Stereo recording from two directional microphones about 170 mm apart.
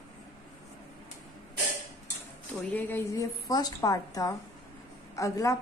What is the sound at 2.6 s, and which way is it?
A woman's voice, 10° left (ahead or behind).